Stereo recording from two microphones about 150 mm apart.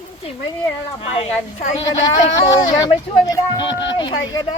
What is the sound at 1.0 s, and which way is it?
Speech, 40° left (ahead or behind).